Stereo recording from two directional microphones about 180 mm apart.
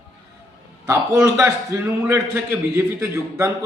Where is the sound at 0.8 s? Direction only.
15° right (ahead or behind).